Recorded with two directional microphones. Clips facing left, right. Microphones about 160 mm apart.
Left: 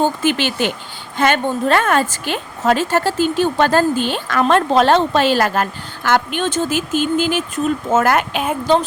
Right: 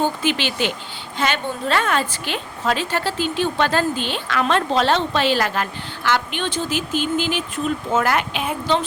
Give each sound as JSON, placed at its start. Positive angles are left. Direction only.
{"t": 0.0, "sound": "a woman's voice", "side_deg": 50}